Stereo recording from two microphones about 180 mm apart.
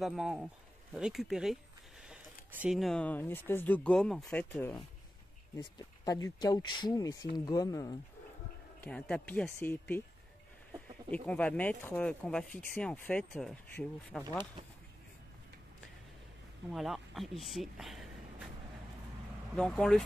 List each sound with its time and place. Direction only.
0.0 s speech: centre (ahead or behind)
5.6 s speech: 20° left (ahead or behind)
8.8 s speech: 5° left (ahead or behind)
11.2 s speech: 10° left (ahead or behind)
16.7 s speech: centre (ahead or behind)
19.5 s speech: 5° left (ahead or behind)